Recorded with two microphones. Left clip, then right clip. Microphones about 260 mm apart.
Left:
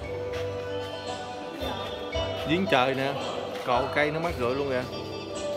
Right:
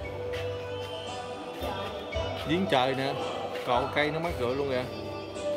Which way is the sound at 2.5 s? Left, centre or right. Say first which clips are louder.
Left 2 dB; centre.